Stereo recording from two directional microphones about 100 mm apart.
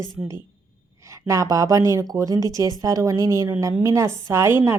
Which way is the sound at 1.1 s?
30° right (ahead or behind).